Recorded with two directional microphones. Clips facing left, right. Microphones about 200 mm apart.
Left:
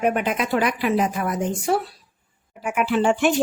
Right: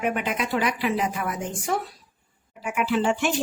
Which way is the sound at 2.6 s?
55° left (ahead or behind).